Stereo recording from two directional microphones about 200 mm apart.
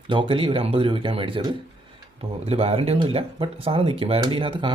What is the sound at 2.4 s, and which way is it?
Speech, 30° right (ahead or behind).